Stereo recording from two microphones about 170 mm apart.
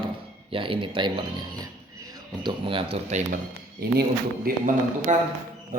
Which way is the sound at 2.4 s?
30° right (ahead or behind).